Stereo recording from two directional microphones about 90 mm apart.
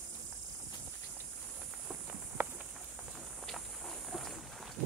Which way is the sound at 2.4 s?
25° right (ahead or behind).